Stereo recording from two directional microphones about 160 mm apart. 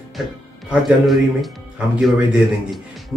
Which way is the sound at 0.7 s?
Centre (ahead or behind).